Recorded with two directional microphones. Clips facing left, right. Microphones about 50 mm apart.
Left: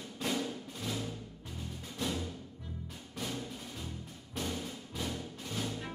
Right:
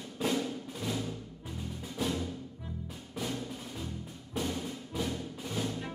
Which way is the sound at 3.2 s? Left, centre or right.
Centre.